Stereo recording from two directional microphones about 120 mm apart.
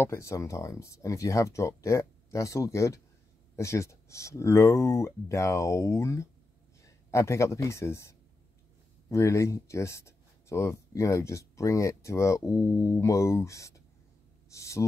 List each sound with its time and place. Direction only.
0.0 s speech: 25° left (ahead or behind)